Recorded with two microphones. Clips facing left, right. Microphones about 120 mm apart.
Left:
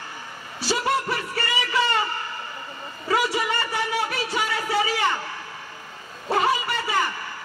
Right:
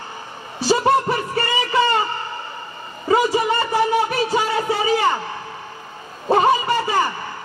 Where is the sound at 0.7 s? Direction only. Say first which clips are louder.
Right 7 dB; 25° right (ahead or behind).